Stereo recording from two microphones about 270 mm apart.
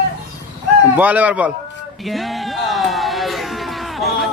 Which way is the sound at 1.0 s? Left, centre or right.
Centre.